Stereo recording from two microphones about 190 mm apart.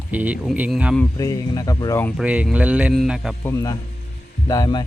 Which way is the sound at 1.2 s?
20° left (ahead or behind).